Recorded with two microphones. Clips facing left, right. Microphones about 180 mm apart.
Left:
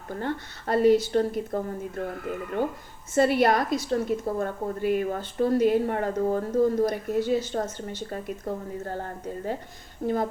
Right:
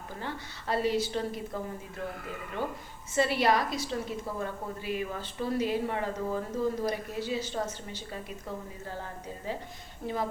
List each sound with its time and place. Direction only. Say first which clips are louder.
0.2 s a woman's voice: left 8 dB; 50° left (ahead or behind)
3.2 s a woman's voice: left 5 dB; 50° left (ahead or behind)
10.0 s speech: left 9 dB; 40° left (ahead or behind)